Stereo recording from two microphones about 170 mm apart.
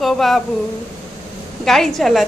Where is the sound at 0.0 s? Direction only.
Centre (ahead or behind).